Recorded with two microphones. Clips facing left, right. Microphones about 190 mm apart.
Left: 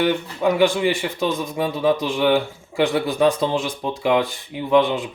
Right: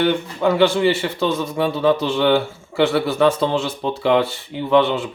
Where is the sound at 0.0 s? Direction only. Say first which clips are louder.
Right 1 dB; 15° left (ahead or behind).